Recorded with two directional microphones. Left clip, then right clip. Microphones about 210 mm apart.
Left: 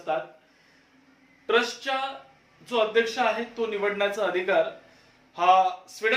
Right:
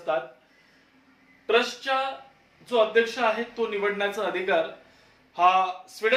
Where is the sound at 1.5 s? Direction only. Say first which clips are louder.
Right 1 dB; 10° left (ahead or behind).